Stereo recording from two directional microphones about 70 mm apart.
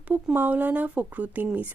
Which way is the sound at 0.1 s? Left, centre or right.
Right.